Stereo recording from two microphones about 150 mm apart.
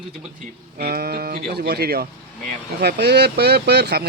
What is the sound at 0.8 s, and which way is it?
Speech, 90° right.